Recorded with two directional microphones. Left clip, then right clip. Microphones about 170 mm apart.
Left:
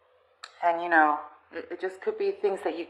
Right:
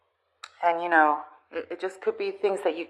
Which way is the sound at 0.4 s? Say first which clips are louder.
Right 1 dB; 25° right (ahead or behind).